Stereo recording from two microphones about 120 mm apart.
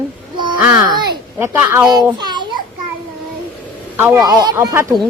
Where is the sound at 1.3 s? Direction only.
20° right (ahead or behind).